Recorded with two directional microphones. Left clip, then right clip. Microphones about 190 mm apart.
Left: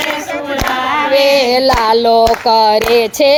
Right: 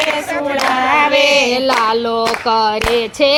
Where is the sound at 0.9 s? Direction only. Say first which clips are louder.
Left 3 dB; 55° right (ahead or behind).